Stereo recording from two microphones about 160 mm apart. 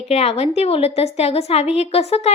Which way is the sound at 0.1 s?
40° left (ahead or behind).